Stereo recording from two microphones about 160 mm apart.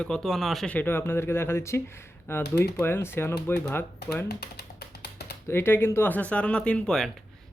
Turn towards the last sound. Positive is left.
turn(degrees=5)  # may be behind; listen again after turning